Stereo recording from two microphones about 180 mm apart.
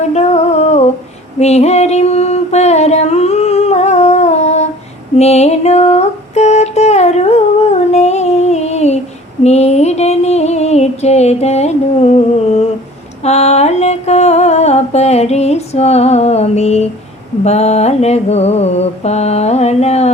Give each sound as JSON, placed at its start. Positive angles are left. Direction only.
{"t": 0.0, "sound": "humming", "side_deg": 35}
{"t": 1.4, "sound": "a sound", "side_deg": 35}
{"t": 13.2, "sound": "mantra", "side_deg": 35}